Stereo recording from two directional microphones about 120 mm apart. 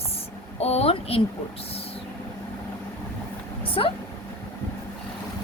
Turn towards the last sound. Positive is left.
turn(degrees=50)  # may be behind; listen again after turning